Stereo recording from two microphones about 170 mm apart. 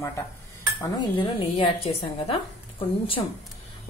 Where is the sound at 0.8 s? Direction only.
30° left (ahead or behind).